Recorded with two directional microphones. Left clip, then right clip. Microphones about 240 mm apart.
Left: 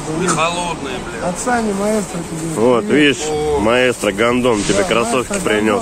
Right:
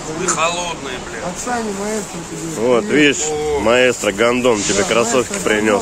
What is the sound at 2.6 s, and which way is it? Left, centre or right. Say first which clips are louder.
Speech: left 1 dB; centre.